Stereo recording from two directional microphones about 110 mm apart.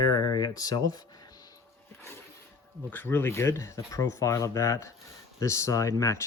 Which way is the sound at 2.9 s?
20° left (ahead or behind).